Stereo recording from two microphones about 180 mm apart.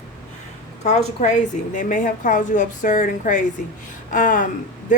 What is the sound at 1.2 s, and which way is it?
A woman's voice, 45° left (ahead or behind).